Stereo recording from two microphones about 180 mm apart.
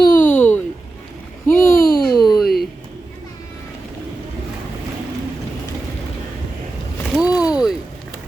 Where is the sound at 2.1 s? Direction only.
25° left (ahead or behind).